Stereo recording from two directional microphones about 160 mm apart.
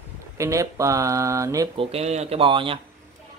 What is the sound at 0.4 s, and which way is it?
Speech, 20° right (ahead or behind).